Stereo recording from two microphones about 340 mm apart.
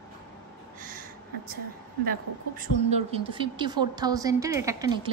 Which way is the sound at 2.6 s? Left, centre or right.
Centre.